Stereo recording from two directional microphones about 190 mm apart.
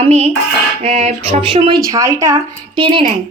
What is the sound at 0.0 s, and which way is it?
A woman's voice, 35° right (ahead or behind).